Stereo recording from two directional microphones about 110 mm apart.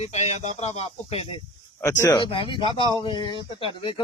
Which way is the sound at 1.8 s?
30° left (ahead or behind).